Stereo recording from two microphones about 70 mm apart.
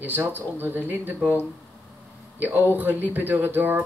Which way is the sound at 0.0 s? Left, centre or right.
Right.